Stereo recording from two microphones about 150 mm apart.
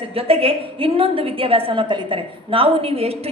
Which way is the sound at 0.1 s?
40° right (ahead or behind).